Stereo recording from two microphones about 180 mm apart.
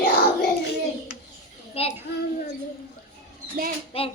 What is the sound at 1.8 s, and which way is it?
Children playing, 30° left (ahead or behind).